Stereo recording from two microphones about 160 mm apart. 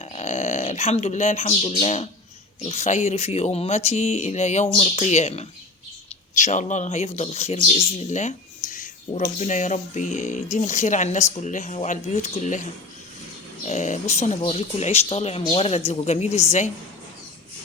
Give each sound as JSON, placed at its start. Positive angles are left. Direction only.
{"t": 0.0, "sound": "a sound", "side_deg": 40}
{"t": 1.8, "sound": "speech", "side_deg": 40}
{"t": 13.7, "sound": "speech", "side_deg": 45}